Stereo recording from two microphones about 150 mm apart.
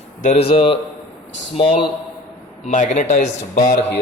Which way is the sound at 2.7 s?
55° left (ahead or behind).